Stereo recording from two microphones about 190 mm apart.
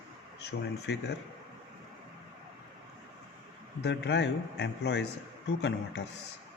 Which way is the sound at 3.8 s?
65° left (ahead or behind).